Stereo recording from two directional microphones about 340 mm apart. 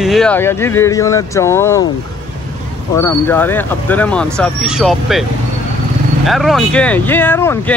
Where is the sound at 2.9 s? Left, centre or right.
Centre.